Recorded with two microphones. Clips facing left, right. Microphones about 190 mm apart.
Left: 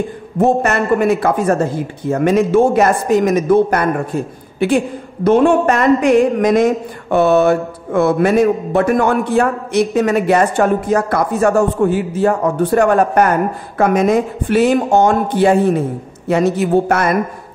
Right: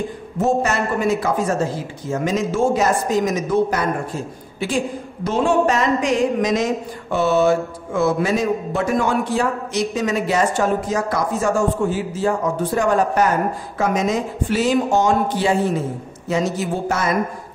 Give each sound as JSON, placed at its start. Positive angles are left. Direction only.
{"t": 0.4, "sound": "speech", "side_deg": 60}